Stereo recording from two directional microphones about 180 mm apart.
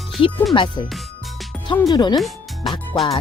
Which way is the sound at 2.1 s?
Centre (ahead or behind).